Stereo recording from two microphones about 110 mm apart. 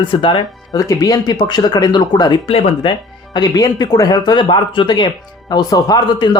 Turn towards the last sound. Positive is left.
turn(degrees=40)  # may be behind; listen again after turning